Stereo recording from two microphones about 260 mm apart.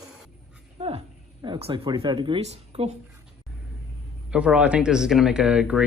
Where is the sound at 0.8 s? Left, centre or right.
Right.